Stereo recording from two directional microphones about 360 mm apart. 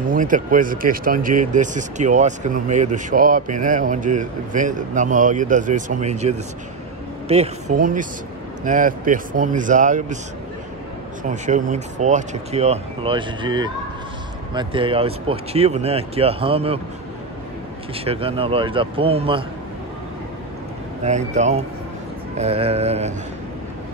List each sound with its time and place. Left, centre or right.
0.1 s speech: right
11.2 s speech: right
18.0 s speech: centre
21.0 s speech: centre